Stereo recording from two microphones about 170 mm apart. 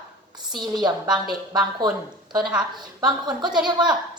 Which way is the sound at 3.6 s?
25° right (ahead or behind).